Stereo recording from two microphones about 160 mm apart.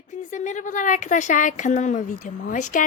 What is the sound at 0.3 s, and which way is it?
Speech, 50° left (ahead or behind).